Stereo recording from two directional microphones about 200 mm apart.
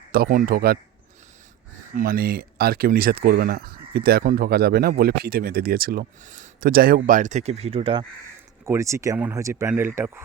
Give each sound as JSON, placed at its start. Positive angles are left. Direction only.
{"t": 0.1, "sound": "speech", "side_deg": -45}
{"t": 2.0, "sound": "speech", "side_deg": -50}
{"t": 8.6, "sound": "speech", "side_deg": -15}